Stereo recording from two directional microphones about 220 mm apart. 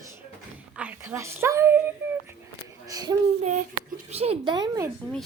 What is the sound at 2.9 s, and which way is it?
Speech, 15° right (ahead or behind).